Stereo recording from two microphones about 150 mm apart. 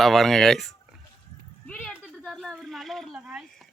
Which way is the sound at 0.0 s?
Centre (ahead or behind).